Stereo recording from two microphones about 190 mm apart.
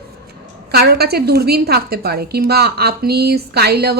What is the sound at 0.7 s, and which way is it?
A woman's voice, 55° right (ahead or behind).